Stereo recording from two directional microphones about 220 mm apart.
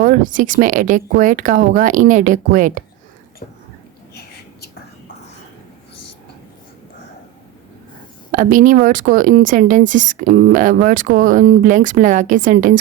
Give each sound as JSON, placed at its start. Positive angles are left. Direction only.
{"t": 0.0, "sound": "speech", "side_deg": -35}
{"t": 3.4, "sound": "speech", "side_deg": 35}
{"t": 4.1, "sound": "whispering", "side_deg": 45}
{"t": 8.3, "sound": "speech", "side_deg": -40}